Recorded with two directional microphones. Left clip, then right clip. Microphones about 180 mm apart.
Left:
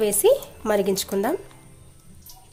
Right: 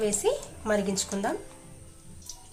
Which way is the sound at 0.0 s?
50° left (ahead or behind).